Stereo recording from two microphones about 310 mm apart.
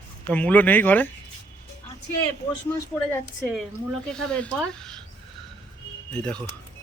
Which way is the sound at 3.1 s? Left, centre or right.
Centre.